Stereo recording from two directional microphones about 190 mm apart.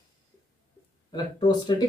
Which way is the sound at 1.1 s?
20° left (ahead or behind).